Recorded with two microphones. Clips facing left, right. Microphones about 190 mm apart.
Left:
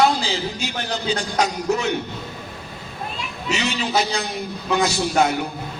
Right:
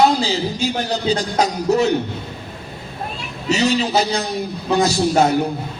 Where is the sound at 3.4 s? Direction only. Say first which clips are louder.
Right 7 dB; 40° right (ahead or behind).